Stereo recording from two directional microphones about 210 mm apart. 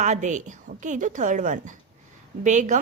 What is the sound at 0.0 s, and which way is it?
A woman's voice, 35° right (ahead or behind).